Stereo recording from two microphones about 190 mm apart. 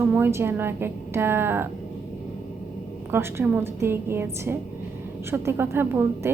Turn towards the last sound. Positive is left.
turn(degrees=-10)  # may be behind; listen again after turning